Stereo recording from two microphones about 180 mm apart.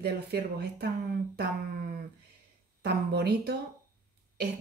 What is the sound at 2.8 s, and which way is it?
Speech, 65° right (ahead or behind).